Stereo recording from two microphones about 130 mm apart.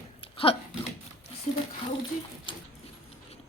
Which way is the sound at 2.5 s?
40° left (ahead or behind).